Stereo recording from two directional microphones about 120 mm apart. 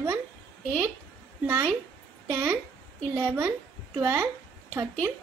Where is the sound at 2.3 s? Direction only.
25° right (ahead or behind).